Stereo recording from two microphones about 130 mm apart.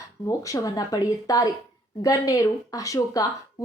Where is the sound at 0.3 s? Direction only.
25° left (ahead or behind).